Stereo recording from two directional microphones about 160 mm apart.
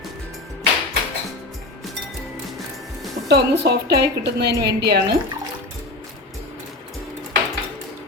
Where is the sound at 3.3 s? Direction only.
85° right.